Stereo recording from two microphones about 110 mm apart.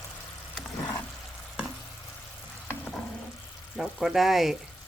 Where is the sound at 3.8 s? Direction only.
5° right (ahead or behind).